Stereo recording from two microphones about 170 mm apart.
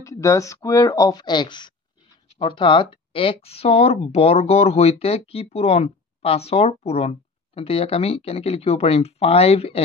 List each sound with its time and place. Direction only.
0.0 s speech: 20° left (ahead or behind); by 9.8 s 35° left (ahead or behind)